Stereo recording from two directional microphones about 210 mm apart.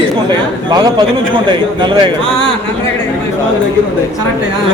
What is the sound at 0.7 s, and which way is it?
A man's voice, 20° right (ahead or behind).